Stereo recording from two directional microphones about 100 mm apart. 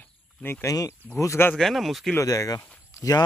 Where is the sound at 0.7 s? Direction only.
35° left (ahead or behind).